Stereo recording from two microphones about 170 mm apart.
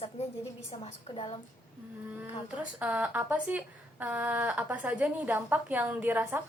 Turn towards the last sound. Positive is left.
turn(degrees=-10)  # may be behind; listen again after turning